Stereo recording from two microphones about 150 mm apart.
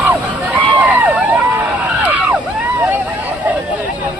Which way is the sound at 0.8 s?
10° right (ahead or behind).